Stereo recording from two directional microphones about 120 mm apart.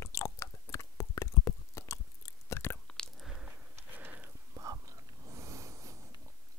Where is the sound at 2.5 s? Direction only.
20° left (ahead or behind).